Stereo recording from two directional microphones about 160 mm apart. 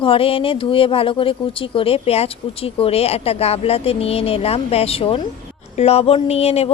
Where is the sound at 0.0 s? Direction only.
35° left (ahead or behind).